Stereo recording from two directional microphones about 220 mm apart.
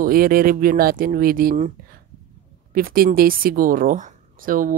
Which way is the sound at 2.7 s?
40° right (ahead or behind).